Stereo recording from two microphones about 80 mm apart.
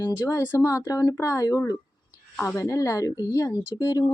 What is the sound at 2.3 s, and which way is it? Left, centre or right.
Speech, centre.